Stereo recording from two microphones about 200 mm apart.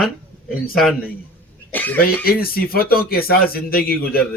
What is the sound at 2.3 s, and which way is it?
A man's voice, 50° left (ahead or behind).